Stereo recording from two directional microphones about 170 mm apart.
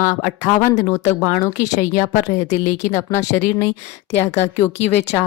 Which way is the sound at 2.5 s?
45° left (ahead or behind).